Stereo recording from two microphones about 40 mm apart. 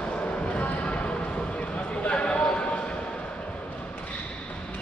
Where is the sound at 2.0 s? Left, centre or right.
Left.